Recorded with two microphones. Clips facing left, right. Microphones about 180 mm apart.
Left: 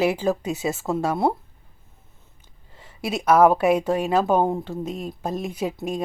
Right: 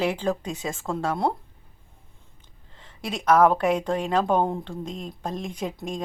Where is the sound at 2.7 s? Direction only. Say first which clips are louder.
Left 5 dB; 10° left (ahead or behind).